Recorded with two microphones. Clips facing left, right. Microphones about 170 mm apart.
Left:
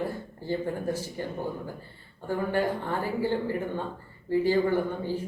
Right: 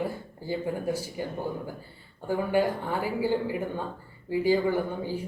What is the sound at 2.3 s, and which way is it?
Speech, 10° right (ahead or behind).